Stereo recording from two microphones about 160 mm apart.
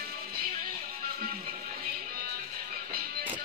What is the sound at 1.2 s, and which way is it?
Music, 60° right (ahead or behind).